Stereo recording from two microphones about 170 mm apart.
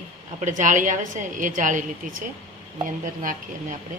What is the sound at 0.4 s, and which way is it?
A woman's voice, 45° right (ahead or behind).